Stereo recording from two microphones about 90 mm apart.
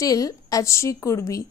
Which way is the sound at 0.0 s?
40° left (ahead or behind).